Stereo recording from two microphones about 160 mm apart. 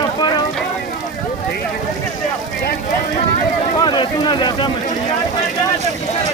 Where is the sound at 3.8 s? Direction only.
25° left (ahead or behind).